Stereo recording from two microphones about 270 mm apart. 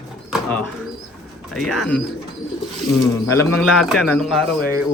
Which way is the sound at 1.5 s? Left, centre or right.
Centre.